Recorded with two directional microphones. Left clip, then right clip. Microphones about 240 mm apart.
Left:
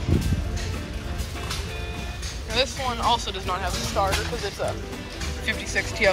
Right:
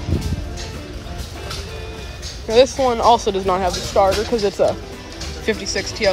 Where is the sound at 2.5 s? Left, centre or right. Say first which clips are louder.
Right 11 dB; right.